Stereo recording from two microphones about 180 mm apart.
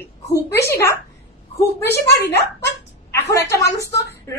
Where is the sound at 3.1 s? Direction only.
15° left (ahead or behind).